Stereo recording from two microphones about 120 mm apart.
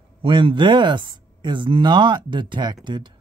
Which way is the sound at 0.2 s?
45° right (ahead or behind).